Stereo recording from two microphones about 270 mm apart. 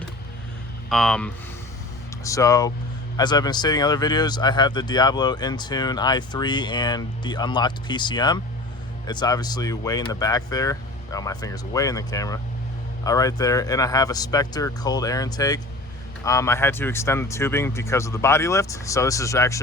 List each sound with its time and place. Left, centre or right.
0.9 s speech: centre